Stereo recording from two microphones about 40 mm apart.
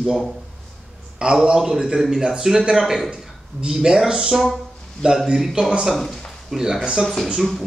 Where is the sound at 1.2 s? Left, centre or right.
Right.